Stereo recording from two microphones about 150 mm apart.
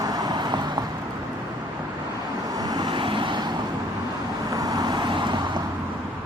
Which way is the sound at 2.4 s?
25° right (ahead or behind).